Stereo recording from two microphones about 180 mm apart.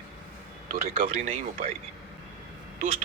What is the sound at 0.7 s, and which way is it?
Speech, 45° right (ahead or behind).